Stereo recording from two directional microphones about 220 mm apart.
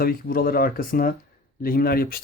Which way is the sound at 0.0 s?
40° left (ahead or behind).